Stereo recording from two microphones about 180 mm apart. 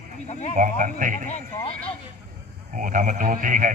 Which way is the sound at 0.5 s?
45° right (ahead or behind).